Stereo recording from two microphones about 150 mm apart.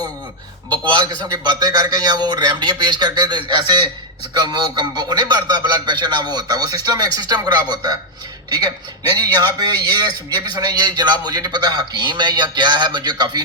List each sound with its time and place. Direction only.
0.7 s a man's voice: 30° right (ahead or behind)